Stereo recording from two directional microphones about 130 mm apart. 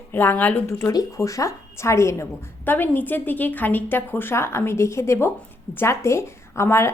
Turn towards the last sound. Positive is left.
turn(degrees=20)  # may be behind; listen again after turning